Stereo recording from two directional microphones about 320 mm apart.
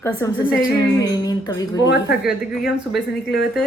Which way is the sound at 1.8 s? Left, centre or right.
Left.